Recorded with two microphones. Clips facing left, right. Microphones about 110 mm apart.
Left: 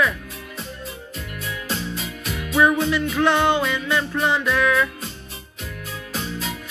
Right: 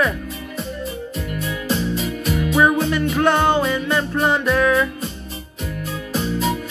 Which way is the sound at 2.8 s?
45° right (ahead or behind).